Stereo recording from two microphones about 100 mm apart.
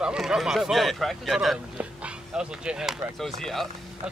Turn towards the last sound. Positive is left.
turn(degrees=0)  # may be behind; listen again after turning